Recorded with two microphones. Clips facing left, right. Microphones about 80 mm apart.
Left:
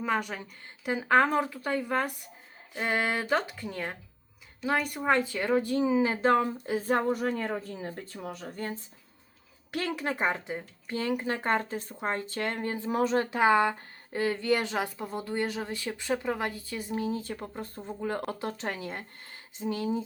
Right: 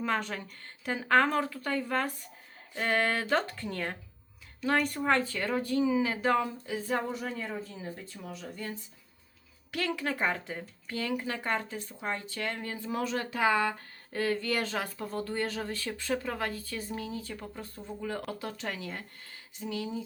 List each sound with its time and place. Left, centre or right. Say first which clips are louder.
0.0 s a woman's voice: left 2 dB; centre; by 8.8 s left
9.7 s speech: left 1 dB; left
12.5 s speech: left 5 dB; left
17.1 s speech: left 5 dB; left